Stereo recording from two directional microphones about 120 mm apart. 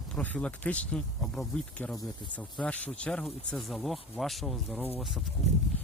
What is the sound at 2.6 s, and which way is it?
Speech, 10° left (ahead or behind).